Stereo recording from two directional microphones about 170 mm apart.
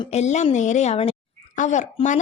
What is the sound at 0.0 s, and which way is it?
A woman's voice, 40° left (ahead or behind).